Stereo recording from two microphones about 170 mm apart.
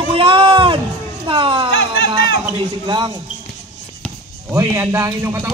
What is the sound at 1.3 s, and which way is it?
Speech, 30° right (ahead or behind).